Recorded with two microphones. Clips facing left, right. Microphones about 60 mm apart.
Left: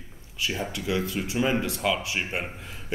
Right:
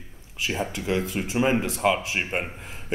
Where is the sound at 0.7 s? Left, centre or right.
Right.